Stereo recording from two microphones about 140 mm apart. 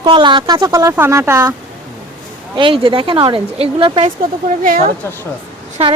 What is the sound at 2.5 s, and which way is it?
Speech, 35° right (ahead or behind).